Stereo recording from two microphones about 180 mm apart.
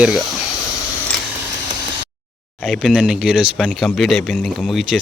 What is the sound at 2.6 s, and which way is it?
Speech, centre (ahead or behind).